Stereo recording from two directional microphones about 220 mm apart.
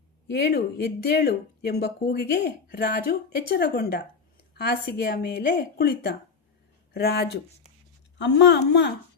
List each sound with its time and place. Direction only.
0.3 s speech: 50° left (ahead or behind)